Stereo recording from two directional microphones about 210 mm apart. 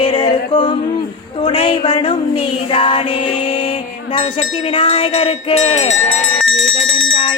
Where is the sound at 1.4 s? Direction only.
25° left (ahead or behind).